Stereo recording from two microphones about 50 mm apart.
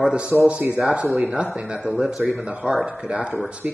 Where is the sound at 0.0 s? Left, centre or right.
Centre.